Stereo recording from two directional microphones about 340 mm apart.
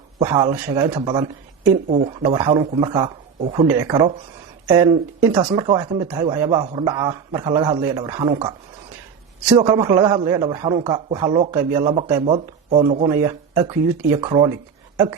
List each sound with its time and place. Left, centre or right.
0.2 s speech: centre
14.2 s speech: centre